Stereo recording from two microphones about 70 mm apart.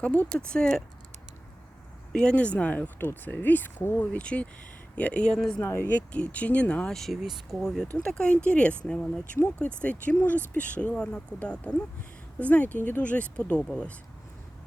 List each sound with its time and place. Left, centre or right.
0.0 s speech: centre
2.1 s speech: centre
5.5 s speech: left
6.1 s speech: centre
6.9 s speech: centre
7.9 s speech: centre